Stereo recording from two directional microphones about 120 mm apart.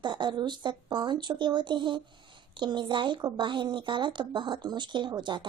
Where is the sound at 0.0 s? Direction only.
40° right (ahead or behind).